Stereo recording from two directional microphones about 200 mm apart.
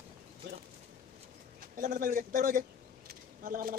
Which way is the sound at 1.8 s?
40° right (ahead or behind).